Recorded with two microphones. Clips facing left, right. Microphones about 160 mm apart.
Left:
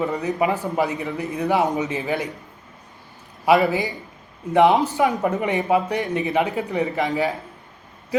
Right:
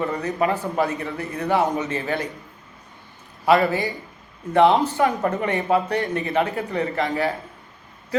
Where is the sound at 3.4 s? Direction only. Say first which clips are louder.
Left 1 dB; 15° left (ahead or behind).